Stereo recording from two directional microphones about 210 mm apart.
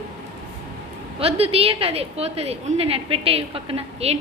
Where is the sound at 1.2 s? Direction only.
30° right (ahead or behind).